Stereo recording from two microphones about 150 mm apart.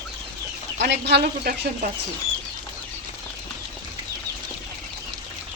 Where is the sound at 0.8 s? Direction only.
90° right.